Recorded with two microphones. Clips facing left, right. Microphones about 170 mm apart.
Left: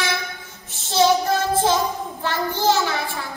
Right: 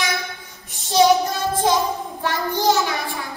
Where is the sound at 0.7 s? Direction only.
15° right (ahead or behind).